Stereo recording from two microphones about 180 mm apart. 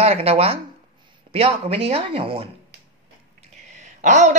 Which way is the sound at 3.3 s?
40° right (ahead or behind).